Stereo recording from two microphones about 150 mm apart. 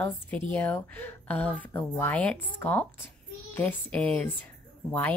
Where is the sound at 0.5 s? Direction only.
10° left (ahead or behind).